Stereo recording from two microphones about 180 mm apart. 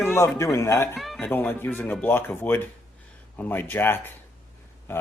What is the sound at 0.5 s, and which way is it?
Speech, 15° left (ahead or behind).